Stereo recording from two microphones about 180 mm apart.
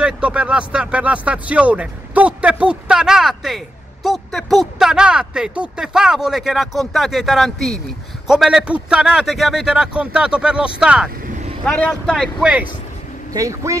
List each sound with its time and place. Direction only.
0.0 s speech: 5° right (ahead or behind)
11.2 s vehicle: 45° right (ahead or behind)
11.6 s speech: 5° left (ahead or behind)
13.3 s speech: 15° right (ahead or behind)